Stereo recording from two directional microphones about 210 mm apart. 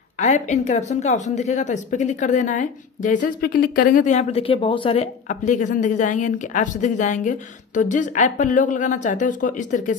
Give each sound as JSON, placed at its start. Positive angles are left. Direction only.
{"t": 0.2, "sound": "speech", "side_deg": 35}